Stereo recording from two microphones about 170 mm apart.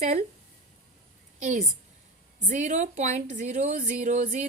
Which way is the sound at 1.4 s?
45° right (ahead or behind).